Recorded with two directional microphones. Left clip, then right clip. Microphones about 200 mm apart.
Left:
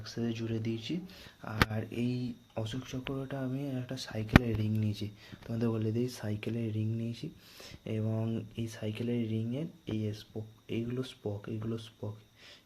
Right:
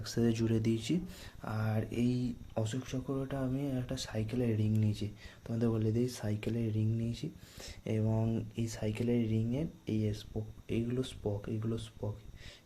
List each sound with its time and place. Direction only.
0.0 s speech: 35° right (ahead or behind)
1.4 s speech: 5° right (ahead or behind)
3.1 s speech: centre (ahead or behind)